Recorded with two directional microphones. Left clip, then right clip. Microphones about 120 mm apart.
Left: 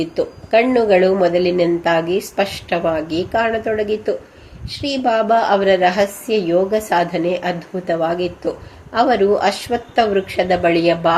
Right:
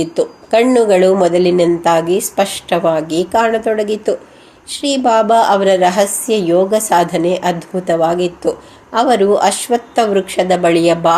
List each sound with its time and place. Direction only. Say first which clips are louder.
0.0 s a woman's voice: right 4 dB; 35° right (ahead or behind)